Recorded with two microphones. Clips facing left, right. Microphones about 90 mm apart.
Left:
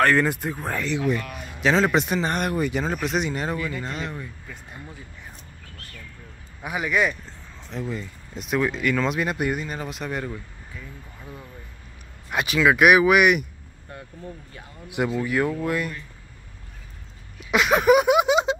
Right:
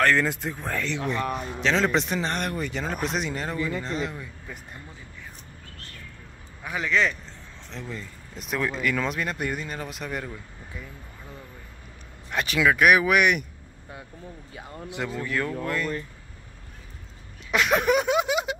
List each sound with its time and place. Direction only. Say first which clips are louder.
0.0 s speech: left 2 dB; 10° left (ahead or behind)
1.2 s a man's voice: right 8 dB; 40° right (ahead or behind)
1.6 s speech: left 4 dB; 10° left (ahead or behind)
6.6 s speech: left 1 dB; 15° left (ahead or behind)
12.3 s speech: left 3 dB; 10° left (ahead or behind)
14.9 s speech: left 6 dB; 10° left (ahead or behind)
17.5 s a sound: left 4 dB; 5° left (ahead or behind); by 18.6 s 25° left (ahead or behind)